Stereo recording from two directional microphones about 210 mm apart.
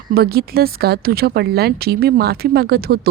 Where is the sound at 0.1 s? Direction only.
45° right (ahead or behind).